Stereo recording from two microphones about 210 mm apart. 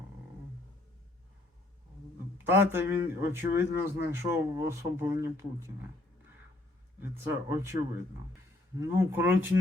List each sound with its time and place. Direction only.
2.4 s a man's voice: 10° right (ahead or behind)
7.0 s a man's voice: 10° right (ahead or behind)
8.8 s a man's voice: 15° right (ahead or behind)